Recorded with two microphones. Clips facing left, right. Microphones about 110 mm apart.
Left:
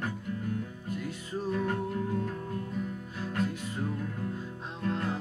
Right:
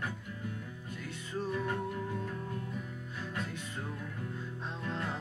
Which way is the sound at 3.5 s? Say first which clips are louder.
Left 7 dB; 15° left (ahead or behind).